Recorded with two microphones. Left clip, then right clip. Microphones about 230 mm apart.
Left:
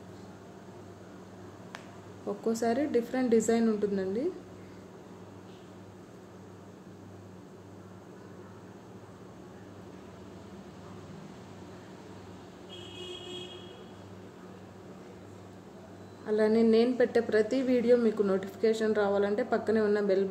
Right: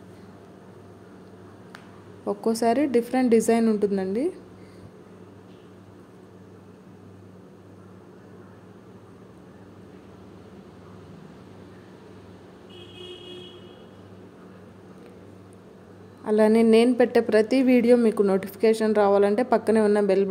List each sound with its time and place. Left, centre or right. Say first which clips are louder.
2.2 s a woman's voice: right 7 dB; right
16.3 s a woman's voice: right 7 dB; right